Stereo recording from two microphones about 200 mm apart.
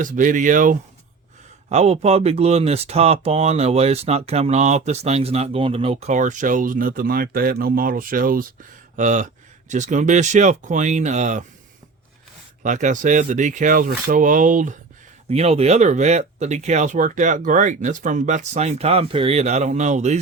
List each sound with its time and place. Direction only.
0.0 s speech: 40° right (ahead or behind)
12.6 s speech: 40° right (ahead or behind)